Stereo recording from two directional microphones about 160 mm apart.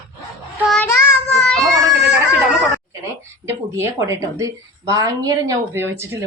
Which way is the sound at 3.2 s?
15° right (ahead or behind).